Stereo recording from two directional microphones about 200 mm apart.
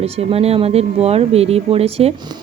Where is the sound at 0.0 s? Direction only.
30° right (ahead or behind).